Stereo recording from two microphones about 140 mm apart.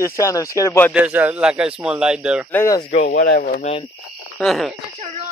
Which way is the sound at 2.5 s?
20° left (ahead or behind).